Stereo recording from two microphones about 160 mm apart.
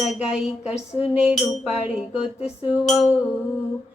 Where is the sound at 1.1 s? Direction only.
5° right (ahead or behind).